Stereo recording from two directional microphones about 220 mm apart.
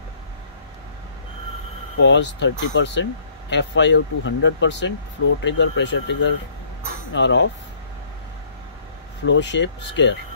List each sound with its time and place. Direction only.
2.0 s speech: 55° left (ahead or behind)
9.2 s speech: 55° left (ahead or behind)